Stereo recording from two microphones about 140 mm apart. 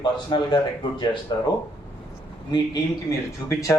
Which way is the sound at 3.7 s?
15° left (ahead or behind).